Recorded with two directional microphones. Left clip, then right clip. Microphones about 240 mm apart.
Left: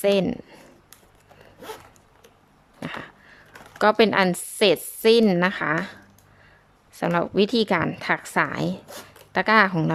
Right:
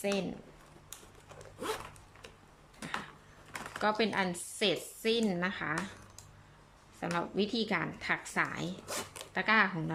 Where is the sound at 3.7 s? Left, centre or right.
Left.